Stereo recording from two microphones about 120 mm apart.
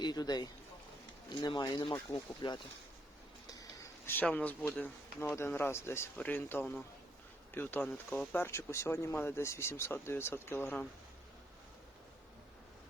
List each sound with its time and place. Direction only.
0.0 s speech: 35° left (ahead or behind)
3.4 s a sound: 30° left (ahead or behind)
4.1 s speech: 10° left (ahead or behind)